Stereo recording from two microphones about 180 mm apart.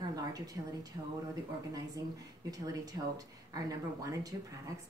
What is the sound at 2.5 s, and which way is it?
Speech, 20° right (ahead or behind).